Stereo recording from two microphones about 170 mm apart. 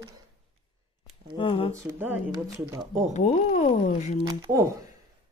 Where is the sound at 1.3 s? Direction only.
30° left (ahead or behind).